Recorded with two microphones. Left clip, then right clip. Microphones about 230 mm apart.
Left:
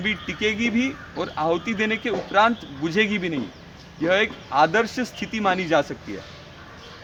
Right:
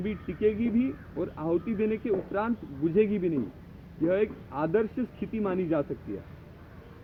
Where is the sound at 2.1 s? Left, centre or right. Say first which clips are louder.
Left 10 dB; left.